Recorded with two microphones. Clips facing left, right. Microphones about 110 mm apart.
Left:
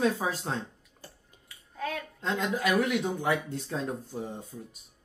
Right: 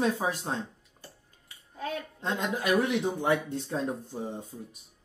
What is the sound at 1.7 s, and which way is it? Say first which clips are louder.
A woman's voice: even; 25° right (ahead or behind).